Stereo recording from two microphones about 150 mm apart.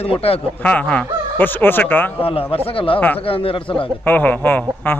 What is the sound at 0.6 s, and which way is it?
A man's voice, 10° left (ahead or behind).